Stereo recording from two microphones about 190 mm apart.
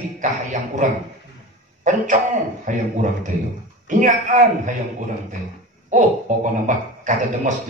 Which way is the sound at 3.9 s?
40° right (ahead or behind).